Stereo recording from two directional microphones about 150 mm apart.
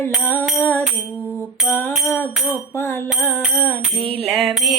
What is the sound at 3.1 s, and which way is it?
Music, centre (ahead or behind).